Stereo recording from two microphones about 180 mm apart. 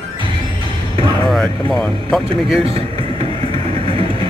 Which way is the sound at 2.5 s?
30° right (ahead or behind).